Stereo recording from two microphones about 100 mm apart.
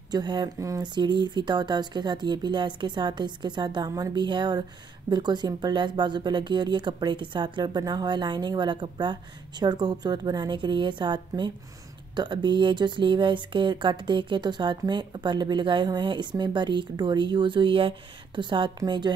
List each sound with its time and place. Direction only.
0.1 s speech: 45° right (ahead or behind)
0.6 s a sound: 35° right (ahead or behind)
0.9 s speech: 50° right (ahead or behind)